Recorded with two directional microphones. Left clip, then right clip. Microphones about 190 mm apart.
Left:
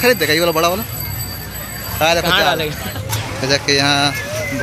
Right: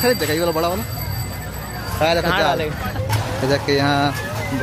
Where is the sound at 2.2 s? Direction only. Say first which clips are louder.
Left 3 dB; 55° left (ahead or behind).